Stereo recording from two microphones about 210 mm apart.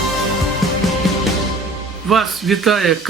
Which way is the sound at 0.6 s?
Centre (ahead or behind).